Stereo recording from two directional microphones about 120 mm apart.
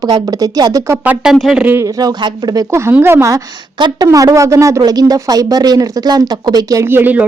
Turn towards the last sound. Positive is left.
turn(degrees=-15)  # may be behind; listen again after turning